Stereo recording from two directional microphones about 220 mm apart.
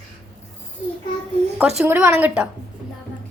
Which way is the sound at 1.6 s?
5° right (ahead or behind).